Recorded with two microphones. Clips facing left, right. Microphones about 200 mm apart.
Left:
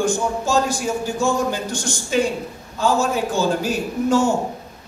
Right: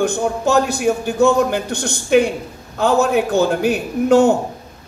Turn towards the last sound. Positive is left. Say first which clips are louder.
# right 5 dB
turn(degrees=-65)  # may be behind; listen again after turning